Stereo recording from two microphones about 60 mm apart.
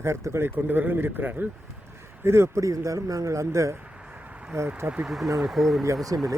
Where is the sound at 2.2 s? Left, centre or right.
Right.